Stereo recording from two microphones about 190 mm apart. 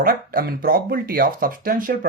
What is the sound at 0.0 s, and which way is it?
Speech, 50° right (ahead or behind).